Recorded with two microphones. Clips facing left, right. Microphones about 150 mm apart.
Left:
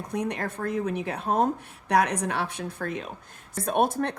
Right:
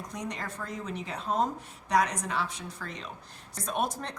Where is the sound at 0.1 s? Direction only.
60° left (ahead or behind).